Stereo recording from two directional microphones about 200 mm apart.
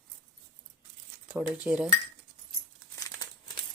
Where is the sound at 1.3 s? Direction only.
5° right (ahead or behind).